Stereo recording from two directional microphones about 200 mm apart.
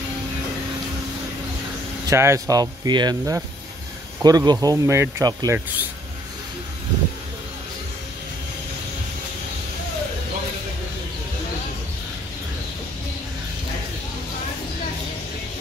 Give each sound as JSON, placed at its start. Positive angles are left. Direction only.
{"t": 2.0, "sound": "speech", "side_deg": -15}